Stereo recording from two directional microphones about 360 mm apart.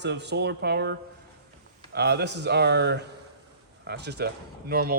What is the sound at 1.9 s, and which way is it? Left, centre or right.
Speech, right.